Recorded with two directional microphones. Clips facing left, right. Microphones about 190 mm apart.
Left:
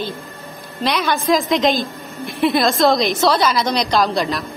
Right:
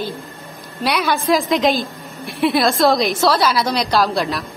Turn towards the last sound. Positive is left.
turn(degrees=0)  # may be behind; listen again after turning